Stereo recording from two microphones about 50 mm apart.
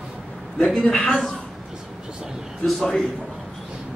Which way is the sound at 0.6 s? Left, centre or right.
Left.